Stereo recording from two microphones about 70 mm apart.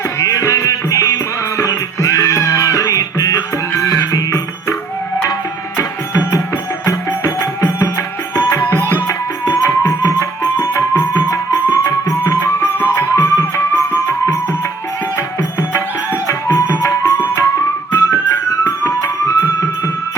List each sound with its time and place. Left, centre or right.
0.2 s music: left
8.6 s tabla: left
9.0 s music: left